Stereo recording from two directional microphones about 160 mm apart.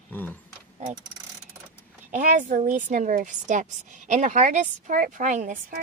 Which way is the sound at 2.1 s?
55° right (ahead or behind).